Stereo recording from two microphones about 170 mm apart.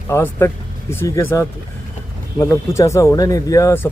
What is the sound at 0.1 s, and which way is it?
Speech, 15° left (ahead or behind).